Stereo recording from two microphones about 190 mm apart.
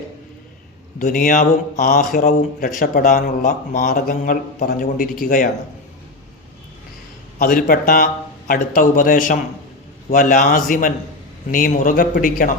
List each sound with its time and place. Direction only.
0.9 s speech: 45° left (ahead or behind)
7.3 s speech: 45° left (ahead or behind)